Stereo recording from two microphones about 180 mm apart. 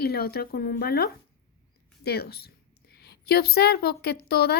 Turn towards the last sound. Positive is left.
turn(degrees=60)  # may be behind; listen again after turning